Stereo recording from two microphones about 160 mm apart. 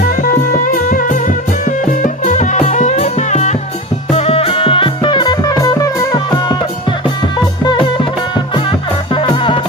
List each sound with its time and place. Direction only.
0.9 s music: 60° left (ahead or behind); by 6.6 s 25° left (ahead or behind)
9.1 s music: 35° left (ahead or behind)